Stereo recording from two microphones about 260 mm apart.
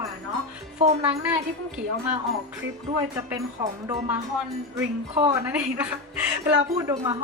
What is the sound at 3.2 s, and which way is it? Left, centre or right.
A woman's voice, centre.